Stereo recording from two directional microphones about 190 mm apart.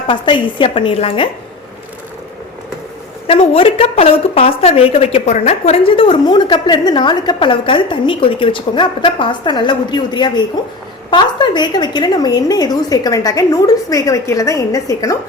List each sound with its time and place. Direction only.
0.1 s a woman's voice: 25° left (ahead or behind)
3.2 s a woman's voice: 30° left (ahead or behind)